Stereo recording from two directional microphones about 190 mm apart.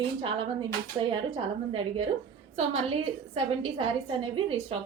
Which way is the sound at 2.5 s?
30° right (ahead or behind).